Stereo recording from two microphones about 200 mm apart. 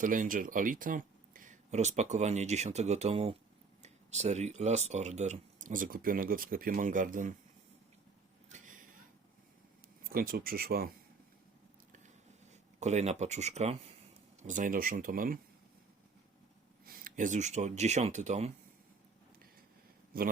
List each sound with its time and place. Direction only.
0.0 s speech: 40° right (ahead or behind)
8.5 s a sound: 40° right (ahead or behind)
10.0 s speech: 45° right (ahead or behind)
12.8 s speech: 35° right (ahead or behind)
16.8 s speech: 45° right (ahead or behind)